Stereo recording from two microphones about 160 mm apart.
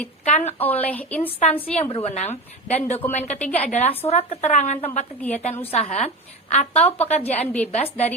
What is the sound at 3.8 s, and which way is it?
Speech, 10° left (ahead or behind).